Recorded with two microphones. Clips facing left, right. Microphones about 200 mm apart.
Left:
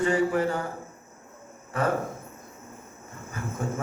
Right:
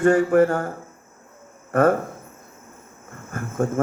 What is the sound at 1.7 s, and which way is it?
Speech, 55° right (ahead or behind).